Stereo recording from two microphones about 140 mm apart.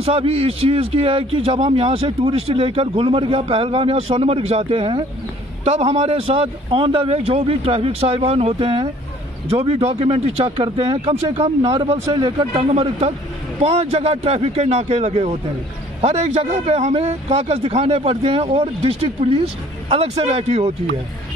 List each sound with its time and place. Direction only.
0.0 s a man's voice: 45° right (ahead or behind)